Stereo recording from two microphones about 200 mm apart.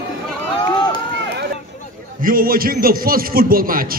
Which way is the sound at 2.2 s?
45° right (ahead or behind).